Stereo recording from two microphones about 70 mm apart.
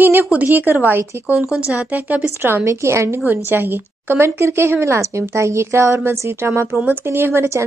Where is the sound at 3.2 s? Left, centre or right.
Right.